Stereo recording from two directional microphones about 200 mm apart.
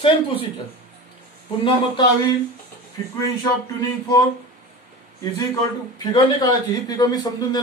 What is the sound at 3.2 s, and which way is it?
Speech, 15° left (ahead or behind).